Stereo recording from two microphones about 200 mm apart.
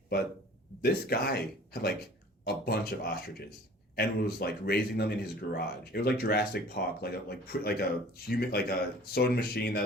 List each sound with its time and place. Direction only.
0.8 s speech: 50° left (ahead or behind)
2.4 s speech: 50° left (ahead or behind)